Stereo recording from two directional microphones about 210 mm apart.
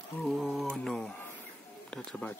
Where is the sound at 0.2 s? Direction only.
Centre (ahead or behind).